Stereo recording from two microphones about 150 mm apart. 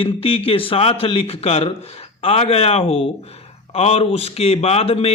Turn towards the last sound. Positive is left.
turn(degrees=40)  # may be behind; listen again after turning